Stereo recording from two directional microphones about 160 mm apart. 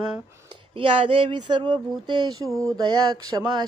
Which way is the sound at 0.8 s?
35° right (ahead or behind).